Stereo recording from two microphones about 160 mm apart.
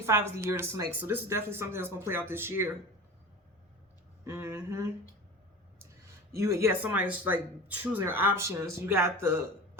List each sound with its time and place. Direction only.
0.0 s speech: 15° right (ahead or behind)
4.2 s speech: 15° right (ahead or behind)